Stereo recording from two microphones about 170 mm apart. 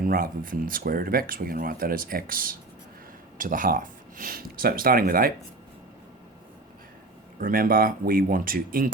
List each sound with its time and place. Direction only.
0.0 s speech: 55° right (ahead or behind)
7.3 s speech: 55° right (ahead or behind)